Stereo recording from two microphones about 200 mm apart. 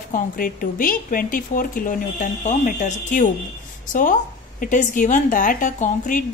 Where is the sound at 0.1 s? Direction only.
45° left (ahead or behind).